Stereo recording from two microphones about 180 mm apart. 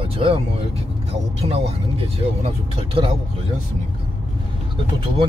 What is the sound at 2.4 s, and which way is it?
Speech, 30° right (ahead or behind).